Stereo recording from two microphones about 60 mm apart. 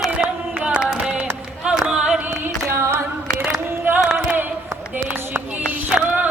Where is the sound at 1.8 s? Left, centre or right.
Centre.